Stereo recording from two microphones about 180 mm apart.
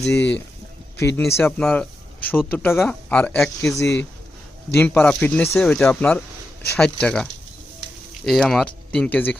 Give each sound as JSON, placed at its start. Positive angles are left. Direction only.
{"t": 0.0, "sound": "speech", "side_deg": 70}
{"t": 0.9, "sound": "a man's voice", "side_deg": 15}
{"t": 3.8, "sound": "speech", "side_deg": 15}